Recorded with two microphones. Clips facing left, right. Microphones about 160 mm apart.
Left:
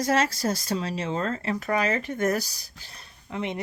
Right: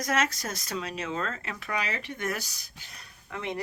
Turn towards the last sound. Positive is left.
turn(degrees=20)  # may be behind; listen again after turning